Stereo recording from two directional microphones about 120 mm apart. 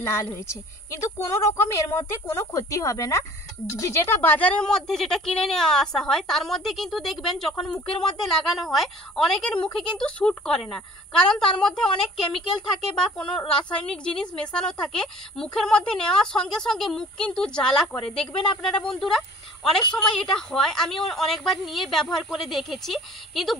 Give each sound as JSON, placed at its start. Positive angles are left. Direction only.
{"t": 0.0, "sound": "a woman's voice", "side_deg": 25}